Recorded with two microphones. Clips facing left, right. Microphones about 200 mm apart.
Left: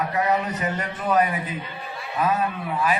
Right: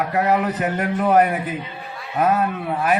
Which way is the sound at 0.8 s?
55° right (ahead or behind).